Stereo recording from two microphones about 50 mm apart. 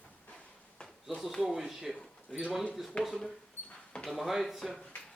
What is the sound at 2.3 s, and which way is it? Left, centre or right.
Speech, centre.